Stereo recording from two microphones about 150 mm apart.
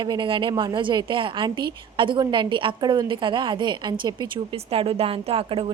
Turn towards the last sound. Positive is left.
turn(degrees=-40)  # may be behind; listen again after turning